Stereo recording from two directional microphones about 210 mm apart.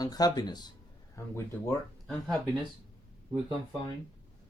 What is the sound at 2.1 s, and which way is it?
Speech, centre (ahead or behind).